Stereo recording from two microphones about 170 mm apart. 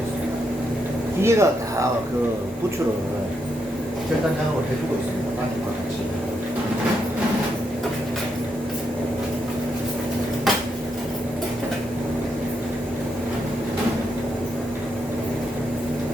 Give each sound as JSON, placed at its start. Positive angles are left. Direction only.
{"t": 1.2, "sound": "speech", "side_deg": -15}